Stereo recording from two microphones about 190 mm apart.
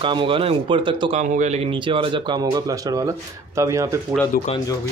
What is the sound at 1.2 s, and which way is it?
Speech, 40° right (ahead or behind).